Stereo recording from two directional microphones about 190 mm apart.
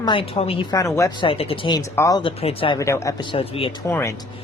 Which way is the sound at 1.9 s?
15° left (ahead or behind).